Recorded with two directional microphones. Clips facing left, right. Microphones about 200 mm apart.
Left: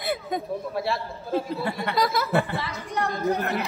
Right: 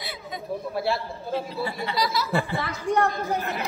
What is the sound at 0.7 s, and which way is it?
Speech, centre (ahead or behind).